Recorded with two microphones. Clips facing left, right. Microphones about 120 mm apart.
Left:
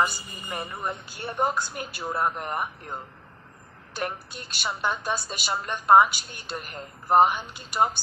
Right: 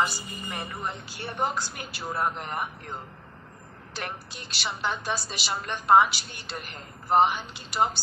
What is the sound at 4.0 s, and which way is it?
A woman's voice, 45° left (ahead or behind).